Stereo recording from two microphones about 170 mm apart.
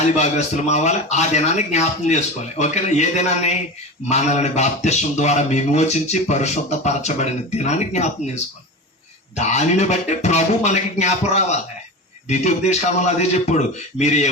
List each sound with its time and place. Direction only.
0.2 s speech: 40° left (ahead or behind)
9.4 s a man's voice: 40° left (ahead or behind)